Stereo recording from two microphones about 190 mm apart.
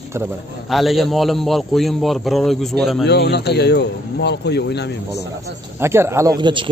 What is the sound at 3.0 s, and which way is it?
Speech, 60° left (ahead or behind).